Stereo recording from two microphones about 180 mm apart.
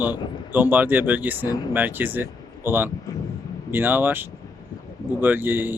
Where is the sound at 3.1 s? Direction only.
20° left (ahead or behind).